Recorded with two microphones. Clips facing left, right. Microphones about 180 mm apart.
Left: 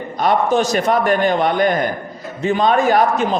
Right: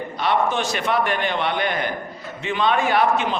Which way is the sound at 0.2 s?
40° left (ahead or behind).